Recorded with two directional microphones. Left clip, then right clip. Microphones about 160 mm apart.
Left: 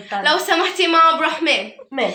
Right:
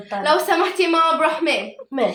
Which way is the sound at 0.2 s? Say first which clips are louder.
Left 1 dB; 5° left (ahead or behind).